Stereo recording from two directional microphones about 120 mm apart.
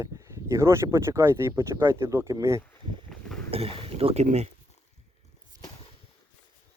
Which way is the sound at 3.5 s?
55° right (ahead or behind).